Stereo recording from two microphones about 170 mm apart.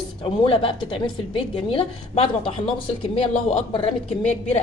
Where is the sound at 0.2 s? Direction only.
30° left (ahead or behind).